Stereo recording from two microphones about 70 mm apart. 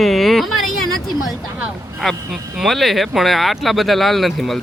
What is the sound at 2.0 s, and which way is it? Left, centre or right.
Speech, centre.